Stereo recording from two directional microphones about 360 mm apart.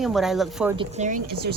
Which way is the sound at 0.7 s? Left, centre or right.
Centre.